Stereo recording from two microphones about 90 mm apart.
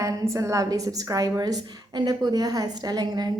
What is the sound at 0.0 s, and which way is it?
A woman's voice, 35° right (ahead or behind).